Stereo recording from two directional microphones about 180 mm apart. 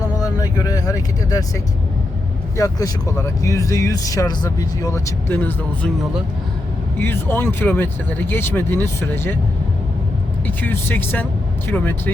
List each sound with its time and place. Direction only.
0.2 s speech: 20° left (ahead or behind)
2.6 s speech: 20° left (ahead or behind)
7.0 s speech: 10° left (ahead or behind)
10.4 s speech: 10° left (ahead or behind)